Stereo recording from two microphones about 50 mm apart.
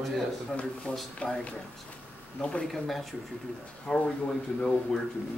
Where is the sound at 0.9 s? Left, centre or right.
Left.